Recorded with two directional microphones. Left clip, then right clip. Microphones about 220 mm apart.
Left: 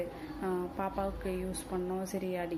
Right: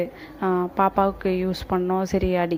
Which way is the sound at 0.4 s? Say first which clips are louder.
Right 14 dB; 40° right (ahead or behind).